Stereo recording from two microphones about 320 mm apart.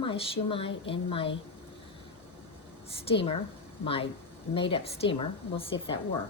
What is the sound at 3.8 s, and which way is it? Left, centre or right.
A woman's voice, centre.